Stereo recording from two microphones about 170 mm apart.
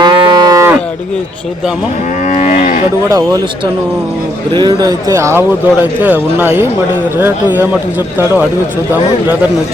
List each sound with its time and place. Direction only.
0.0 s cattle: 25° right (ahead or behind)
2.2 s moo: 45° left (ahead or behind)
3.1 s speech: 20° right (ahead or behind)
4.5 s speech: 25° right (ahead or behind)